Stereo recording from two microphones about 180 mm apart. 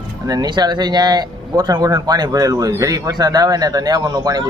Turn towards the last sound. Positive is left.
turn(degrees=-20)  # may be behind; listen again after turning